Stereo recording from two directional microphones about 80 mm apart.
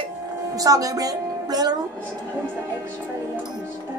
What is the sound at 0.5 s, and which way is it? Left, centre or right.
Speech, right.